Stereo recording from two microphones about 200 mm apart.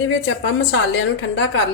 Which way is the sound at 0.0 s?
75° left (ahead or behind).